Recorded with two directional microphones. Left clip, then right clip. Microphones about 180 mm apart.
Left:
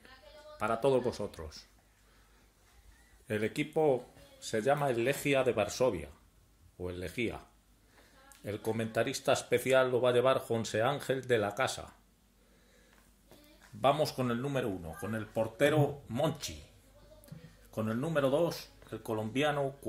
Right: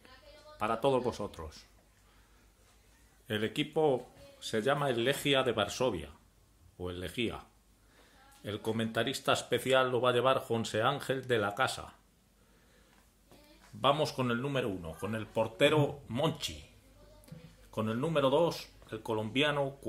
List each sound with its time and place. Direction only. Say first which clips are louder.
0.6 s speech: even; 5° left (ahead or behind)
3.3 s speech: even; centre (ahead or behind)
8.5 s speech: even; centre (ahead or behind)
13.7 s speech: even; centre (ahead or behind)
17.6 s speech: right 1 dB; centre (ahead or behind)